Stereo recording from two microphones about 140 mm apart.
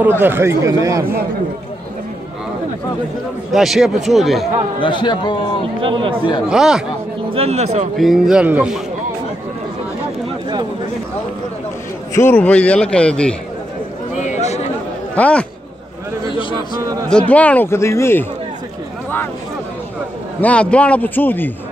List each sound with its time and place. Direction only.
0.0 s speech: 15° right (ahead or behind)
3.5 s speech: centre (ahead or behind)
4.7 s a man's voice: 35° left (ahead or behind)
5.8 s speech: 35° right (ahead or behind)
6.5 s speech: 5° right (ahead or behind)
7.3 s speech: 50° right (ahead or behind)
8.0 s speech: 5° right (ahead or behind)
12.1 s a man's voice: 15° left (ahead or behind)
14.1 s a sound: 55° left (ahead or behind)
15.1 s a man's voice: 10° left (ahead or behind)
17.3 s a man's voice: 10° left (ahead or behind)
20.3 s a man's voice: 10° left (ahead or behind)